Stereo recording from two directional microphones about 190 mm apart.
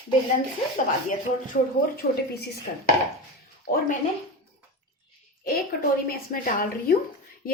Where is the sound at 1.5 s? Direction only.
55° left (ahead or behind).